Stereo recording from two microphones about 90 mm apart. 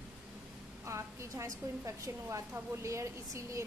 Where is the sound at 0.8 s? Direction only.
35° right (ahead or behind).